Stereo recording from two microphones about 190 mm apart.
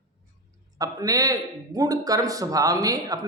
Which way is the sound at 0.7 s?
20° right (ahead or behind).